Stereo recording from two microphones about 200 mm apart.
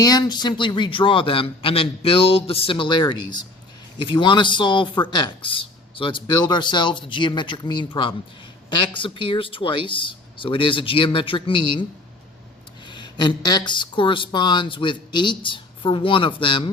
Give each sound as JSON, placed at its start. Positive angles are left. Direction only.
{"t": 0.0, "sound": "a man's voice", "side_deg": 20}
{"t": 12.9, "sound": "a man's voice", "side_deg": 25}